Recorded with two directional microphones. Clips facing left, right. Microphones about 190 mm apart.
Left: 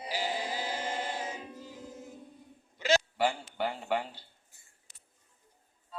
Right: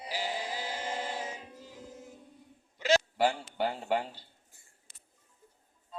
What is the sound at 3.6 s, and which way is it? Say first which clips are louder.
Speech: right 1 dB; 40° right (ahead or behind).